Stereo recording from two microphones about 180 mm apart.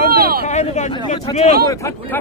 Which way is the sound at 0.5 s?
40° left (ahead or behind).